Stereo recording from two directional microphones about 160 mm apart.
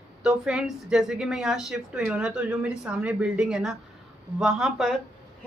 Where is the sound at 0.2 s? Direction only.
5° right (ahead or behind).